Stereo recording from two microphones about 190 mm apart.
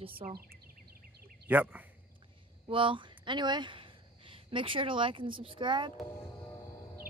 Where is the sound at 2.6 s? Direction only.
25° right (ahead or behind).